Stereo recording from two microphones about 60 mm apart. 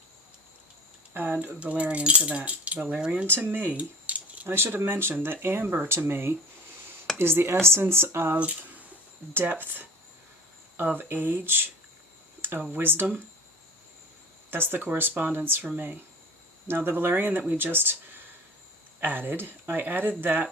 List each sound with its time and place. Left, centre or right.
1.1 s speech: right
1.5 s speech: right
4.4 s speech: right
12.4 s a sound: right
12.7 s speech: right
14.5 s speech: right
16.6 s speech: right
18.9 s speech: right